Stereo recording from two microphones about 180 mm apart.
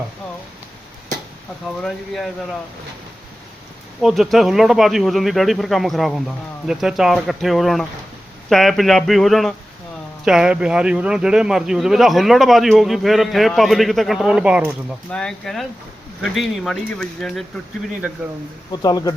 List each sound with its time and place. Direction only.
1.8 s a man's voice: centre (ahead or behind)
4.0 s a man's voice: centre (ahead or behind)
15.1 s a man's voice: 5° left (ahead or behind)
18.0 s speech: 5° right (ahead or behind)
18.7 s speech: 20° left (ahead or behind)